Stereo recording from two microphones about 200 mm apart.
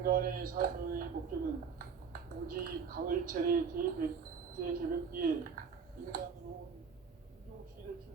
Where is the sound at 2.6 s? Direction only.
45° right (ahead or behind).